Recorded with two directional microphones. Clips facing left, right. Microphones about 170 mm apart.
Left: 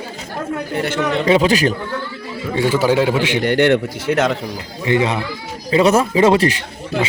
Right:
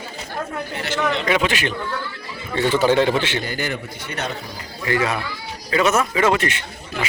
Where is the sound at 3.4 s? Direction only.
75° left (ahead or behind); by 4.4 s 90° left.